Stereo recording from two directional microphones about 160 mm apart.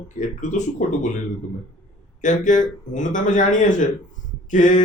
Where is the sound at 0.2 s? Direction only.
50° left (ahead or behind).